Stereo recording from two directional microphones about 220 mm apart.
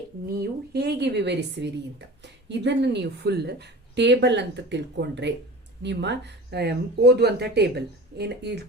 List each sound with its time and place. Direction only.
0.3 s a woman's voice: 45° right (ahead or behind)